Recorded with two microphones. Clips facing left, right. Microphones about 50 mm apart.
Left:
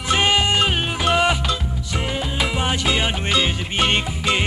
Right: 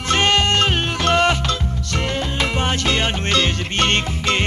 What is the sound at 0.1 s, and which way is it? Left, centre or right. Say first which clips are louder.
Music: right 1 dB; centre.